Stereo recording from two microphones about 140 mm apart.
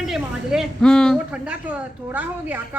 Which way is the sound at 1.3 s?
10° right (ahead or behind).